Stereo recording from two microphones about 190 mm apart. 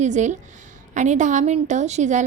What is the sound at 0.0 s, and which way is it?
A woman's voice, 40° right (ahead or behind).